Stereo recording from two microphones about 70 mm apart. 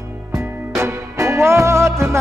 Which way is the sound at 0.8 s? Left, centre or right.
Right.